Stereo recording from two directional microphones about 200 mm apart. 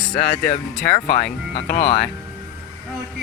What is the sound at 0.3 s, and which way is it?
Speech, 50° left (ahead or behind).